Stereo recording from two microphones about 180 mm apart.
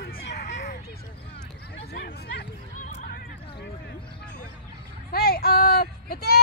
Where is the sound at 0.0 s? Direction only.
60° left (ahead or behind).